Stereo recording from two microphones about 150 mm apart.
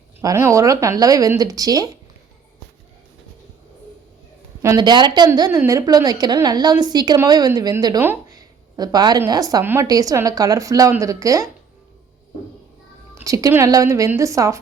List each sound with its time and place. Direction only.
0.2 s a woman's voice: 20° right (ahead or behind)
4.6 s a woman's voice: 25° right (ahead or behind)
8.0 s a sound: 15° right (ahead or behind)
8.7 s a woman's voice: 25° right (ahead or behind)
13.2 s a woman's voice: 20° right (ahead or behind)